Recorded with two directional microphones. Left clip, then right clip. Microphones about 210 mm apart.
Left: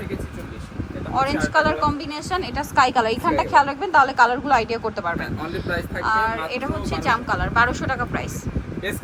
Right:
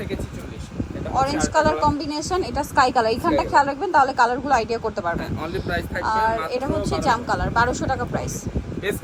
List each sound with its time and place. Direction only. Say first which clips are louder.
1.1 s a woman's voice: even; 15° right (ahead or behind)
5.4 s speech: even; centre (ahead or behind)
7.0 s a woman's voice: left 2 dB; 20° right (ahead or behind)